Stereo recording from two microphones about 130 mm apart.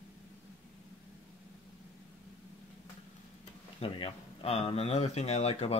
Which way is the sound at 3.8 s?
50° left (ahead or behind).